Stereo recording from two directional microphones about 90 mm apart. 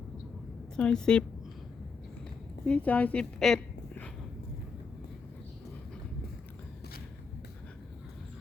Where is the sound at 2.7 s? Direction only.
15° left (ahead or behind).